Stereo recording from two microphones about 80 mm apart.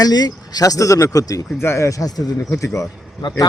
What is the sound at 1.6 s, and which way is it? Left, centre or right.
Speech, left.